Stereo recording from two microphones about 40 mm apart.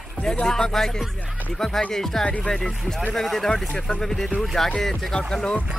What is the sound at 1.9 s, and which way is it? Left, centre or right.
Speech, centre.